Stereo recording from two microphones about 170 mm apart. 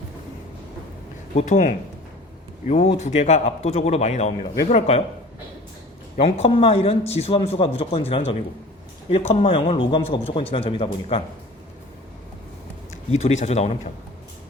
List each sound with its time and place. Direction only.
1.4 s speech: 45° left (ahead or behind)
6.1 s speech: 35° left (ahead or behind)
13.1 s speech: 40° left (ahead or behind)